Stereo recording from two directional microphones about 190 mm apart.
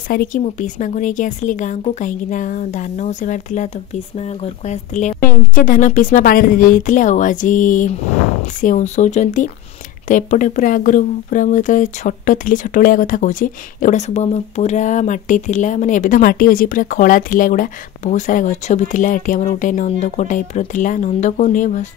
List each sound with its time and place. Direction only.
0.1 s a woman's voice: 45° left (ahead or behind)